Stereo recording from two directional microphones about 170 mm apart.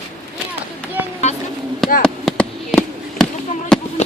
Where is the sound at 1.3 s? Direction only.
40° left (ahead or behind).